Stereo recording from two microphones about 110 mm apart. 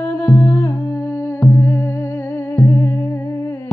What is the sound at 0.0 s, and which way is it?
Music, 15° left (ahead or behind).